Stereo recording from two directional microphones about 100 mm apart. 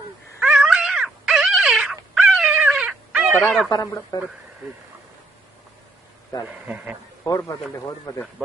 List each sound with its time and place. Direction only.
0.4 s cat: 5° right (ahead or behind)
3.8 s speech: 30° left (ahead or behind)
6.4 s a man's voice: 10° right (ahead or behind)
7.2 s speech: 35° left (ahead or behind)